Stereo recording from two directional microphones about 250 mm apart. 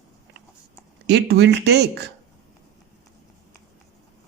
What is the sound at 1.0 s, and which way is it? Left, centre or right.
Speech, right.